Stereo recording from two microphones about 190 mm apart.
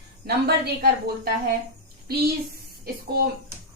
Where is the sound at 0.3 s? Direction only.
55° right (ahead or behind).